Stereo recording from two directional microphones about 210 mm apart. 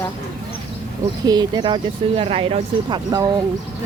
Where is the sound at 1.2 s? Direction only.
20° right (ahead or behind).